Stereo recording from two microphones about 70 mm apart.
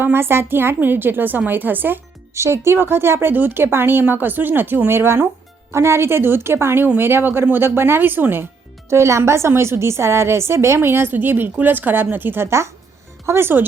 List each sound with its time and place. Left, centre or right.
0.0 s a woman's voice: right
2.3 s a woman's voice: right
8.9 s a woman's voice: right